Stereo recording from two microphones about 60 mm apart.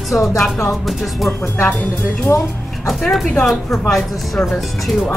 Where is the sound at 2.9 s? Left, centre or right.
Centre.